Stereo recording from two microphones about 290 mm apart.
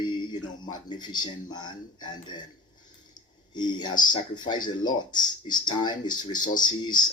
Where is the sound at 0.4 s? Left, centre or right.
Centre.